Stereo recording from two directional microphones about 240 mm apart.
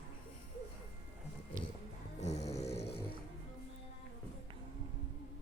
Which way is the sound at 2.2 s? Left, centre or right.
Left.